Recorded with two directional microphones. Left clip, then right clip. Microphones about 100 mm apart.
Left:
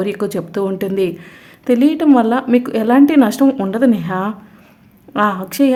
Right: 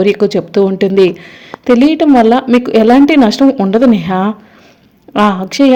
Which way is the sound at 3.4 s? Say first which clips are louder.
Right 5 dB; 5° right (ahead or behind).